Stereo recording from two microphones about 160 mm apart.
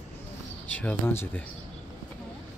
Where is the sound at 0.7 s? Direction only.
10° left (ahead or behind).